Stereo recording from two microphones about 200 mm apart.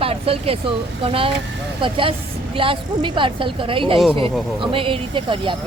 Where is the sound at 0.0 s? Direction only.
30° right (ahead or behind).